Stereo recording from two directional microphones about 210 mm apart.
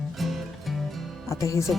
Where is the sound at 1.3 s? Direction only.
15° left (ahead or behind).